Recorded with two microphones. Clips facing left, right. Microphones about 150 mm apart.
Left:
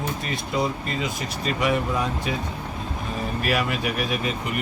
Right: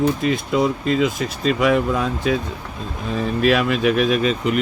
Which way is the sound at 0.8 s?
90° right.